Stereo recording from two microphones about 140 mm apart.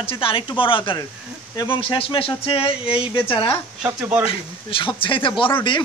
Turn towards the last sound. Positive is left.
turn(degrees=35)  # may be behind; listen again after turning